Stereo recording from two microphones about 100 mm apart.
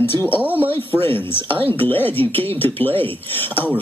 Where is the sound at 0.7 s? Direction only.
25° left (ahead or behind).